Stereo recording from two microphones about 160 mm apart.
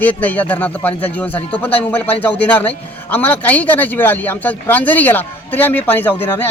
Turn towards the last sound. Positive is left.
turn(degrees=15)  # may be behind; listen again after turning